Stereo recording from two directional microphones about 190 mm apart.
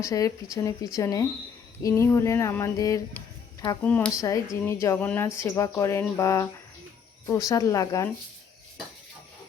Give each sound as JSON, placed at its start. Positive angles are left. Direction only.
{"t": 0.0, "sound": "speech", "side_deg": 15}